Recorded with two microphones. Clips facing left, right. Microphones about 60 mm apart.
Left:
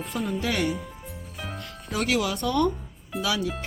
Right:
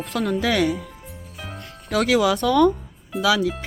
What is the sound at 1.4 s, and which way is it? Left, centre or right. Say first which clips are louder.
Music: even; centre.